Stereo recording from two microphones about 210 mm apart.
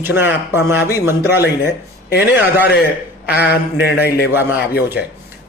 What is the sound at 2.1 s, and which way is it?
A man's voice, 50° left (ahead or behind).